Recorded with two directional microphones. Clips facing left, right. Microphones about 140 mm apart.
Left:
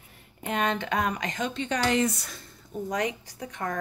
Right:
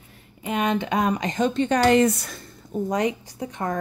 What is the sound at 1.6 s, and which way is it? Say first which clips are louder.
Speech: right 8 dB; 50° right (ahead or behind).